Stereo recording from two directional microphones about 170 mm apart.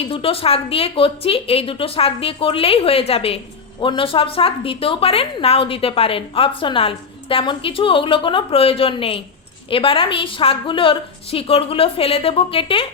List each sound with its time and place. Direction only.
0.1 s a woman's voice: 30° left (ahead or behind)